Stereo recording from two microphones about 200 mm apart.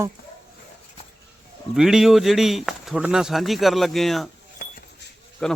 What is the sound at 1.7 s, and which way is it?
A man's voice, centre (ahead or behind).